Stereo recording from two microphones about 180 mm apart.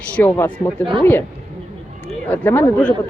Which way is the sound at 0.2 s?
10° left (ahead or behind).